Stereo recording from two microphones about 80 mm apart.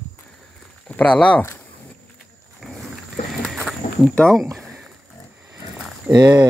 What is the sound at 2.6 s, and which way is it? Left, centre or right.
Wild animals, centre.